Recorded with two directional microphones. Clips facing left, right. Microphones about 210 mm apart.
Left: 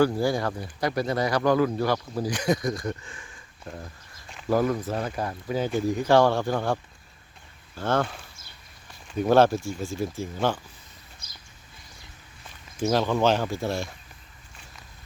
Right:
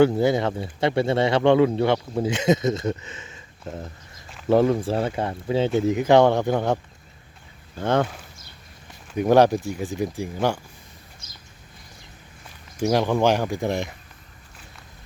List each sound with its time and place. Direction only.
0.0 s speech: 20° right (ahead or behind)
7.8 s speech: 15° right (ahead or behind)
9.1 s speech: 15° right (ahead or behind)
12.8 s speech: 15° right (ahead or behind)